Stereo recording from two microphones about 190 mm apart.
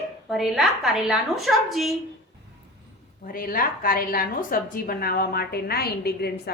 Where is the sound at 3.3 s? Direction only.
50° left (ahead or behind).